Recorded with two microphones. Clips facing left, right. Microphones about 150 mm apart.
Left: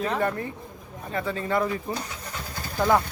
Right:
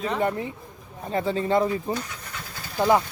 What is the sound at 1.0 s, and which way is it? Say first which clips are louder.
A man's voice: right 4 dB; 30° right (ahead or behind).